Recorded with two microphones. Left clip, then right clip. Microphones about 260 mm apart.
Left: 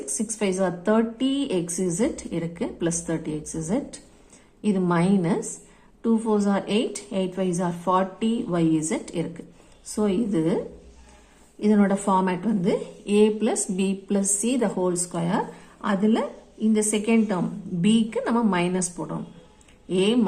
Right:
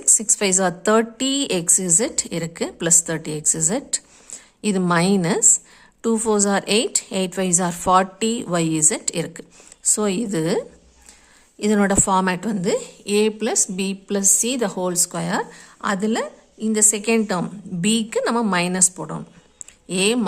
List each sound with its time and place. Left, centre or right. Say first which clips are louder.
0.0 s a woman's voice: right 7 dB; right
11.6 s a woman's voice: right 3 dB; right